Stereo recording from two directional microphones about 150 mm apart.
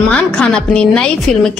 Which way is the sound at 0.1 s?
5° left (ahead or behind).